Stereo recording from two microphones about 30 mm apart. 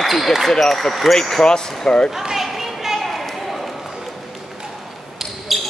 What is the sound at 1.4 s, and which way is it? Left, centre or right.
Speech, left.